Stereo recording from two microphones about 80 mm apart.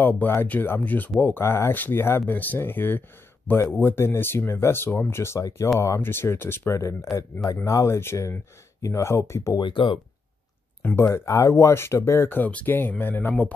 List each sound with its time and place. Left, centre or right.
0.0 s speech: left
8.0 s speech: left
9.6 s speech: left
11.0 s speech: left